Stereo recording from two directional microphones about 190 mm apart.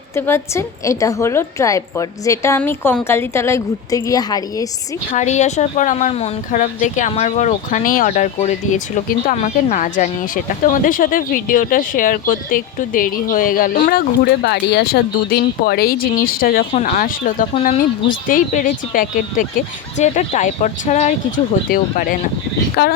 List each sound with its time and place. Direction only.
0.2 s a woman's voice: 15° left (ahead or behind)
5.1 s speech: 40° left (ahead or behind)
14.4 s speech: 60° left (ahead or behind)